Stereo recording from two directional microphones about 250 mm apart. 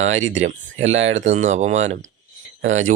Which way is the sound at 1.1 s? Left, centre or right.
Right.